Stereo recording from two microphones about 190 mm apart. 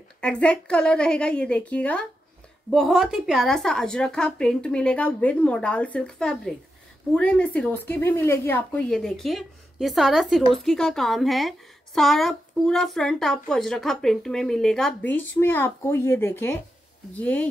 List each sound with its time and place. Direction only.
0.2 s speech: 5° left (ahead or behind)